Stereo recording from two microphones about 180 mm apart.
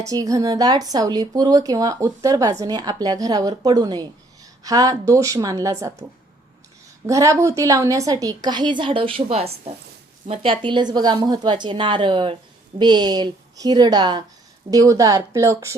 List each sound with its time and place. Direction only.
0.1 s a woman's voice: 20° right (ahead or behind)
7.1 s speech: 15° right (ahead or behind)